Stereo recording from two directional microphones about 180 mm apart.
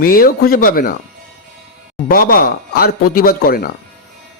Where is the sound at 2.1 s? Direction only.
55° left (ahead or behind).